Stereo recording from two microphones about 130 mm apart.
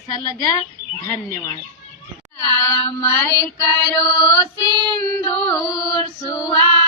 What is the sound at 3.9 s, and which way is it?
Female singing, 30° left (ahead or behind).